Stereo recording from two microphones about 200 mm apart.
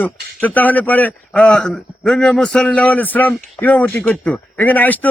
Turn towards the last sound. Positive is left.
turn(degrees=10)  # may be behind; listen again after turning